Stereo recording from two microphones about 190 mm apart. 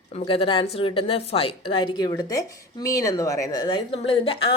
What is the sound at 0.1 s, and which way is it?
A woman's voice, 30° left (ahead or behind).